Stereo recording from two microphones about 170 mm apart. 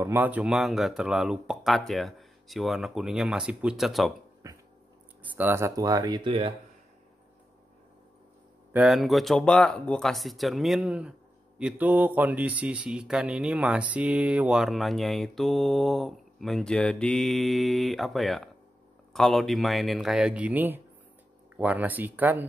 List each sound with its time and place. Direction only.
0.0 s speech: 10° right (ahead or behind)
4.4 s cat: 20° right (ahead or behind)
5.2 s speech: 10° right (ahead or behind); by 6.5 s 30° right (ahead or behind)
8.7 s speech: centre (ahead or behind)